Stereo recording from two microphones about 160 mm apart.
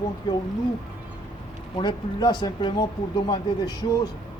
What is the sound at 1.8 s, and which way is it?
Speech, 30° left (ahead or behind).